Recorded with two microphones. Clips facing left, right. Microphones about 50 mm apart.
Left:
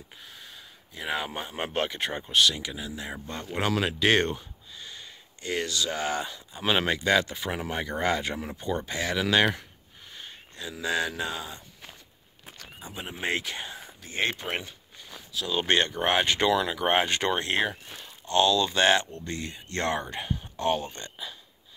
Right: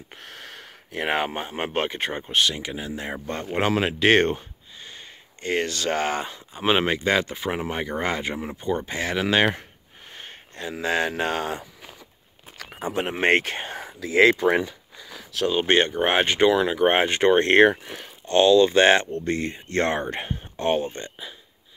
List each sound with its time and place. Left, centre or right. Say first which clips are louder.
0.2 s a sound: right 7 dB; right
1.0 s speech: right 6 dB; right
1.3 s speech: right 4 dB; right
10.1 s speech: right 4 dB; right
12.7 s speech: right 13 dB; right
15.5 s speech: right 4 dB; right
17.4 s speech: right 11 dB; right